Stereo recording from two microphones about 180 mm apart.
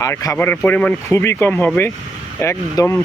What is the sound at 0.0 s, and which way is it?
Speech, 20° left (ahead or behind).